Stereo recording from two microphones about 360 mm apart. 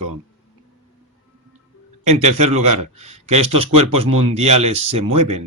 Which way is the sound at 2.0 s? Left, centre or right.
Centre.